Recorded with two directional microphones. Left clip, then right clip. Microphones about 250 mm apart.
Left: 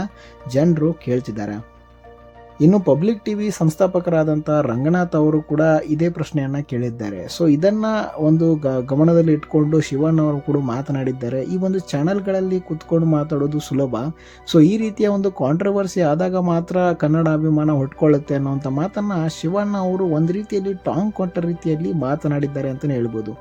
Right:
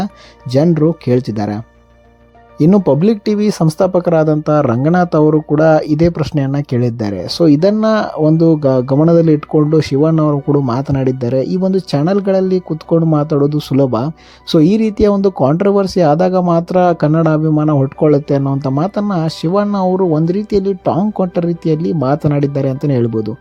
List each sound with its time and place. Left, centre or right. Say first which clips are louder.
0.5 s speech: right 6 dB; right
2.6 s speech: right 4 dB; right